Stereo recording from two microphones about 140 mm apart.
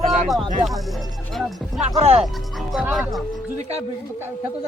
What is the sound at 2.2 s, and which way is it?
Music, centre (ahead or behind).